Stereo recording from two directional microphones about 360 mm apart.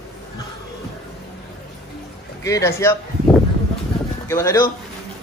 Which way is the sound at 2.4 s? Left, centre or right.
Centre.